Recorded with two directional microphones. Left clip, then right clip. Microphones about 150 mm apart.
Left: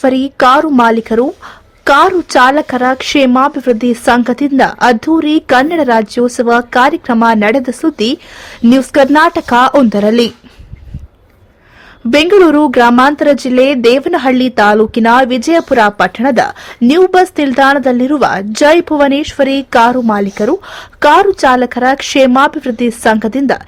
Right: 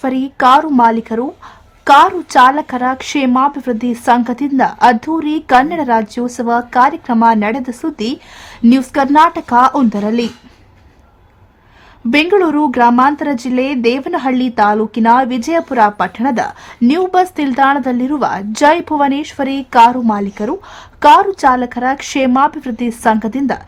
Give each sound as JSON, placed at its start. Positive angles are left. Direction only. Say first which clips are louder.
{"t": 0.0, "sound": "a woman's voice", "louder": "left 4 dB", "side_deg": 30}
{"t": 12.1, "sound": "a woman's voice", "louder": "left 5 dB", "side_deg": 25}